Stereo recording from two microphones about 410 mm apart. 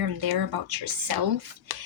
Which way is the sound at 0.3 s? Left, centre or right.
Right.